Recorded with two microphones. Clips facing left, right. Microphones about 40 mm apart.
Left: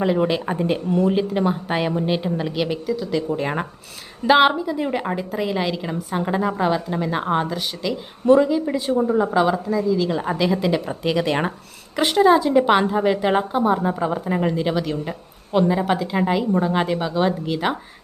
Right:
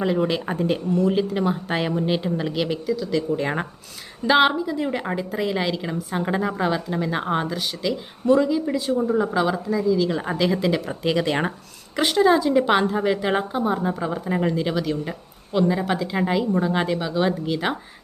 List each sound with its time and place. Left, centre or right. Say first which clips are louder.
0.0 s a woman's voice: left 2 dB; centre
4.3 s a woman's voice: left 2 dB; centre
8.4 s a woman's voice: left 2 dB; centre
12.1 s a woman's voice: left 3 dB; centre